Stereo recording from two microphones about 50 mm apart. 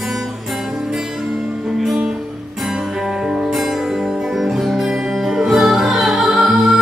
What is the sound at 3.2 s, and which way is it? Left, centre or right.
Music, centre.